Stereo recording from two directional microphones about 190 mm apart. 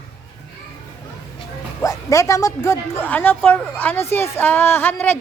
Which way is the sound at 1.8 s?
15° left (ahead or behind).